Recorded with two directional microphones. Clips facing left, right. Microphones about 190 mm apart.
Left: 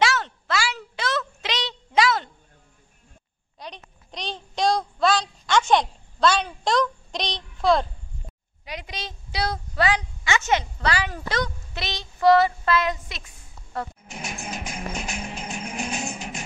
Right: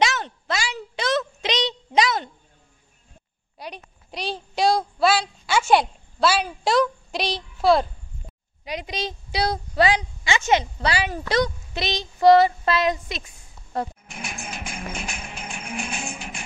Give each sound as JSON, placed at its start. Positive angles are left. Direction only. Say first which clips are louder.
{"t": 0.0, "sound": "a sound", "louder": "even", "side_deg": -20}
{"t": 3.5, "sound": "child singing", "louder": "right 3 dB", "side_deg": -10}
{"t": 8.6, "sound": "a woman's voice", "louder": "right 6 dB", "side_deg": -15}
{"t": 14.0, "sound": "music", "louder": "left 1 dB", "side_deg": 35}